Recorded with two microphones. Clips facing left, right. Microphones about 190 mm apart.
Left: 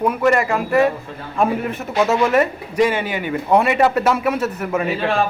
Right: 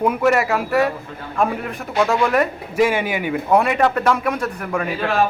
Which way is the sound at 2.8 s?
10° right (ahead or behind).